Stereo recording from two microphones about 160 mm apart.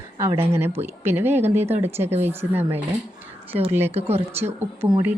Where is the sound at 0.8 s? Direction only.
15° right (ahead or behind).